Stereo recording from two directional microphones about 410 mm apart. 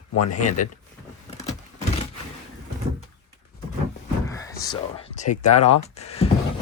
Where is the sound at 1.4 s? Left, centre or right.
Centre.